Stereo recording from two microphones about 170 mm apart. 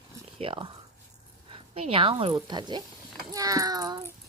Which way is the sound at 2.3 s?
25° right (ahead or behind).